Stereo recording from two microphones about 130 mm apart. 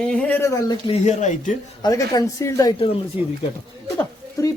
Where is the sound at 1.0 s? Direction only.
70° left (ahead or behind).